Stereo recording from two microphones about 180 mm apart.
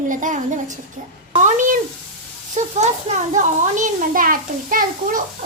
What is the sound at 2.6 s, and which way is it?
A child's voice, 40° right (ahead or behind).